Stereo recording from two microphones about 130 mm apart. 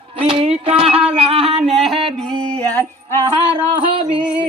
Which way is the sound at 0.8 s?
45° right (ahead or behind).